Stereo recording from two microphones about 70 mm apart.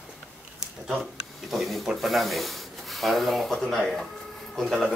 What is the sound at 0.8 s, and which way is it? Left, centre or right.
Speech, centre.